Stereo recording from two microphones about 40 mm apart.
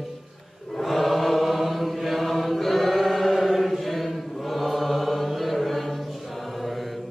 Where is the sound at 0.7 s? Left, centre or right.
Centre.